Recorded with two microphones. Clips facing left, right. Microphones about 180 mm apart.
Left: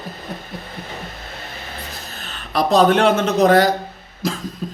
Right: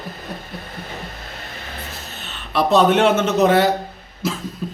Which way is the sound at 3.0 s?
35° left (ahead or behind).